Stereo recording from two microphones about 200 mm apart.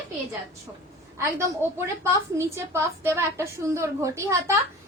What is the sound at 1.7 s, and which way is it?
A woman's voice, 15° right (ahead or behind).